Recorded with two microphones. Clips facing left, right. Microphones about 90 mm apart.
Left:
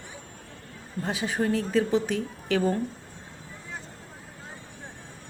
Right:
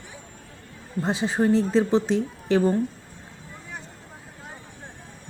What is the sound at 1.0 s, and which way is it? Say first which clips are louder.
Speech: right 5 dB; 30° right (ahead or behind).